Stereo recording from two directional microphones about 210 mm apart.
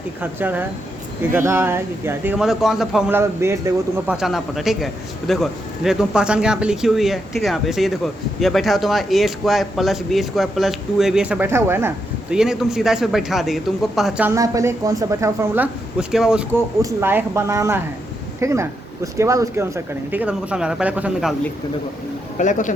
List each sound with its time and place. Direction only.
0.2 s speech: 10° right (ahead or behind)
3.2 s speech: 10° right (ahead or behind)
22.4 s a man's voice: 35° left (ahead or behind)